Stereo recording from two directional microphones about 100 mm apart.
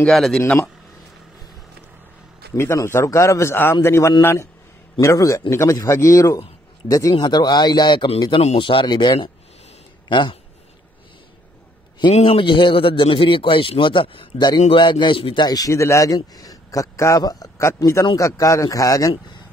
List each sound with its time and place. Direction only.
0.0 s speech: 5° left (ahead or behind)
2.5 s a man's voice: 30° left (ahead or behind); by 8.1 s 50° left (ahead or behind)
8.4 s speech: 90° left
8.6 s speech: 55° left (ahead or behind)
12.1 s a man's voice: 75° left (ahead or behind); by 15.4 s 55° left (ahead or behind)
15.4 s speech: 40° left (ahead or behind)